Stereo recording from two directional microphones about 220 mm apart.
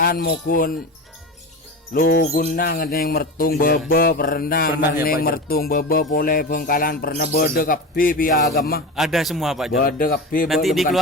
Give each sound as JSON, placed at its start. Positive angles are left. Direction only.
{"t": 0.0, "sound": "speech", "side_deg": 40}
{"t": 1.9, "sound": "music", "side_deg": 40}
{"t": 2.3, "sound": "speech", "side_deg": 45}
{"t": 9.0, "sound": "a man's voice", "side_deg": 0}
{"t": 9.7, "sound": "speech", "side_deg": 40}
{"t": 10.5, "sound": "a man's voice", "side_deg": 0}